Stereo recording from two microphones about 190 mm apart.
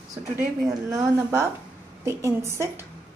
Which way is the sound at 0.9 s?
15° right (ahead or behind).